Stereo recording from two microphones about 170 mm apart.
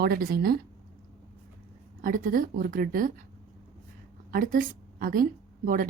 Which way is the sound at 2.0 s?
55° right (ahead or behind).